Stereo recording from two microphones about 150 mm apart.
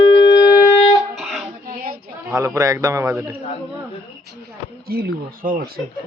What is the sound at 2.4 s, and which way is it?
Speech, 20° right (ahead or behind).